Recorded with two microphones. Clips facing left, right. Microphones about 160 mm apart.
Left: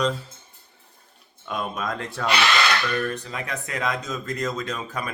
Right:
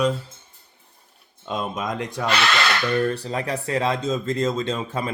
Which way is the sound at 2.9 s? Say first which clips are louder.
Right 5 dB; 30° right (ahead or behind).